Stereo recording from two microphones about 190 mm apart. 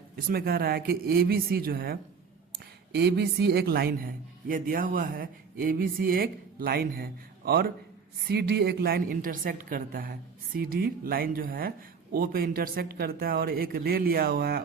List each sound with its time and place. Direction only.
0.3 s a man's voice: 55° right (ahead or behind)